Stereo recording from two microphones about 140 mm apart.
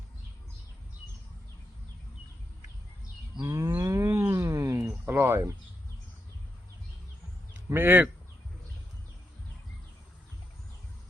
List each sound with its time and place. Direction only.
3.4 s livestock: 20° right (ahead or behind)
7.5 s speech: 15° right (ahead or behind)